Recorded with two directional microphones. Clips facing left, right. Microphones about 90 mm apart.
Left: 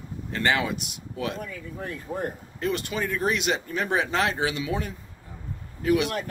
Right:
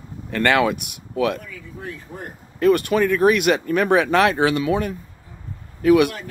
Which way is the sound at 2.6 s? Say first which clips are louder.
Right 11 dB; 60° right (ahead or behind).